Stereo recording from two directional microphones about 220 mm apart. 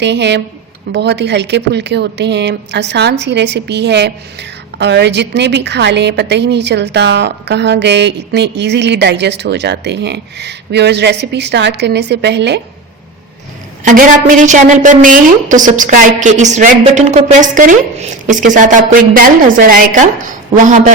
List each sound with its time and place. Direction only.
0.0 s speech: 50° right (ahead or behind)
13.8 s a woman's voice: 35° right (ahead or behind)